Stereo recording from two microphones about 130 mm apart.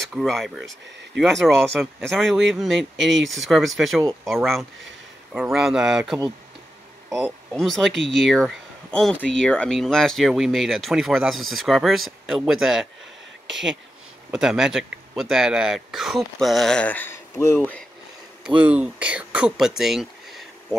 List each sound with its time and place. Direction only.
0.1 s speech: centre (ahead or behind)
7.6 s speech: centre (ahead or behind)
14.3 s speech: 5° right (ahead or behind); by 17.8 s 15° left (ahead or behind)
18.4 s speech: 10° right (ahead or behind)